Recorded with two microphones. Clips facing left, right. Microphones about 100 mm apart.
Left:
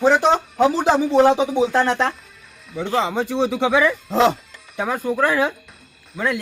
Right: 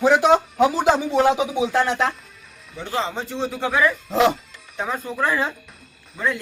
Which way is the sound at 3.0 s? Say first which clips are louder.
Left 5 dB; 70° left (ahead or behind).